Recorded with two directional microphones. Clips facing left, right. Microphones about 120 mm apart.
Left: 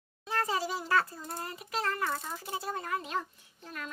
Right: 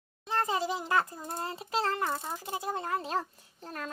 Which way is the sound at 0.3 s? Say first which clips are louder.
Right 2 dB; 25° right (ahead or behind).